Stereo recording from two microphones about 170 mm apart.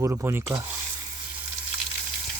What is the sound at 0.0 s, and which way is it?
Speech, 15° right (ahead or behind).